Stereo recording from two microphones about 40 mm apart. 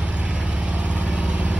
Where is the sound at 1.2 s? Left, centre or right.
Right.